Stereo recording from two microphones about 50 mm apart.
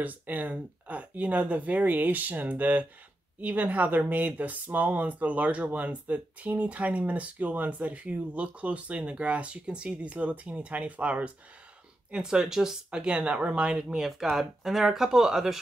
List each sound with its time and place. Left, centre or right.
0.0 s speech: right
12.1 s speech: centre
13.0 s speech: right